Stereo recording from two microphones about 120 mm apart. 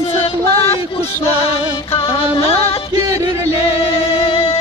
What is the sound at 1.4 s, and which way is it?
Music, 55° left (ahead or behind).